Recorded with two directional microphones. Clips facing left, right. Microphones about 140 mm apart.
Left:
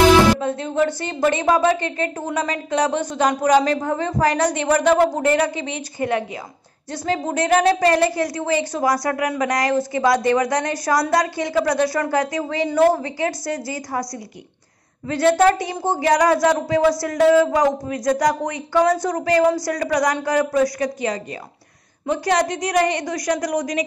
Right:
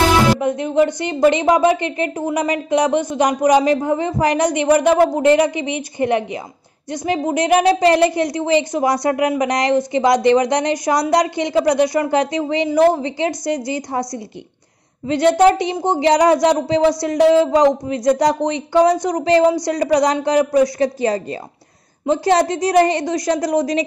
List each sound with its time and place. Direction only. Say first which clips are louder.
0.4 s a woman's voice: right 4 dB; 15° right (ahead or behind)